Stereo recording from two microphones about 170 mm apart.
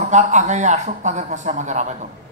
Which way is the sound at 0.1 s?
45° right (ahead or behind).